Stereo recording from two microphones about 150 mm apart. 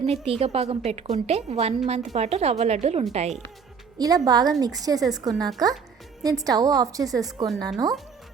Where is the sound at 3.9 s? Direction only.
25° right (ahead or behind).